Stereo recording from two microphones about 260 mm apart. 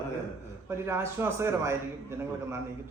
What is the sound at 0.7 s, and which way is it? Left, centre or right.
A man's voice, centre.